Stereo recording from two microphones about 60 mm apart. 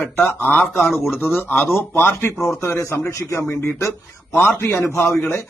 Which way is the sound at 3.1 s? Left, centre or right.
Left.